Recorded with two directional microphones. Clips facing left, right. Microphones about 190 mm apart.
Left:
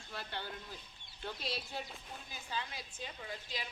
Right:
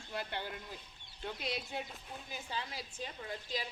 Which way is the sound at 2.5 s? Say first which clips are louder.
Left 1 dB; 30° right (ahead or behind).